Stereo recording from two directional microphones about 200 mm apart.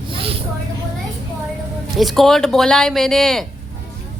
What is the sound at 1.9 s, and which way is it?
Speech, centre (ahead or behind).